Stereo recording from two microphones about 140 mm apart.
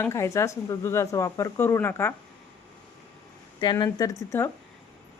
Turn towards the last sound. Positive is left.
turn(degrees=15)  # may be behind; listen again after turning